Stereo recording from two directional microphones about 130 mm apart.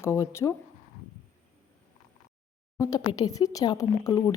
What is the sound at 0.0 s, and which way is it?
Speech, 20° left (ahead or behind).